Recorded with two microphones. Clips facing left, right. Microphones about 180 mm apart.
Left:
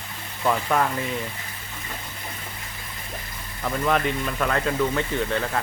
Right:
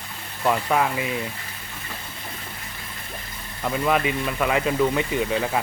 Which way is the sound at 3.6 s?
5° right (ahead or behind).